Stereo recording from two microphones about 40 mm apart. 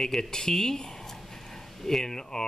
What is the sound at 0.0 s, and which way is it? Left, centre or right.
Speech, centre.